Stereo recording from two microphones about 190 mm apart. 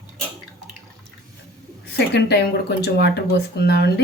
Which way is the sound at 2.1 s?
60° left (ahead or behind).